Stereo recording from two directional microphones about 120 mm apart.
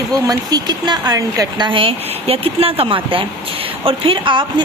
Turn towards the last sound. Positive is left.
turn(degrees=-45)  # may be behind; listen again after turning